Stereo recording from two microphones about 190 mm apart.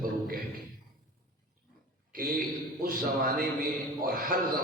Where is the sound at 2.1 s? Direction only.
50° right (ahead or behind).